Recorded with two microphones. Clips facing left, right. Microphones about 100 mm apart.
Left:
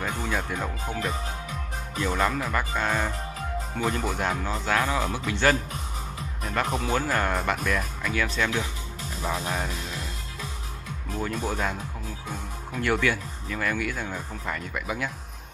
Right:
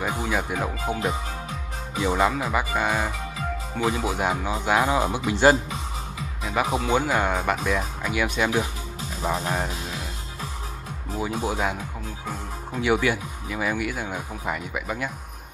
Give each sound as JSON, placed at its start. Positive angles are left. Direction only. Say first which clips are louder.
{"t": 0.0, "sound": "speech", "louder": "right 3 dB", "side_deg": -10}
{"t": 6.4, "sound": "speech", "louder": "right 3 dB", "side_deg": -5}
{"t": 9.5, "sound": "music", "louder": "right 3 dB", "side_deg": -5}
{"t": 11.1, "sound": "speech", "louder": "right 2 dB", "side_deg": -10}